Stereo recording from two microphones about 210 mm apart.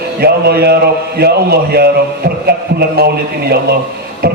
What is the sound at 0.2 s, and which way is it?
A man's voice, 50° right (ahead or behind).